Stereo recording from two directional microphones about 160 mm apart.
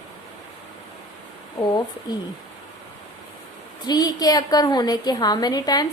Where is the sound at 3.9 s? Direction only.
25° left (ahead or behind).